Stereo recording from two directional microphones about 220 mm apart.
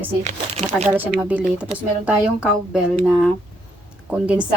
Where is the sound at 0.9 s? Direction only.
10° right (ahead or behind).